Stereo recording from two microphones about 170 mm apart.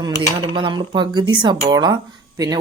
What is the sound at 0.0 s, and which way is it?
Speech, 25° right (ahead or behind).